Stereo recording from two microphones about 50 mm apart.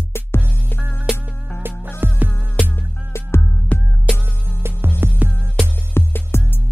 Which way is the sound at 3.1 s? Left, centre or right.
Left.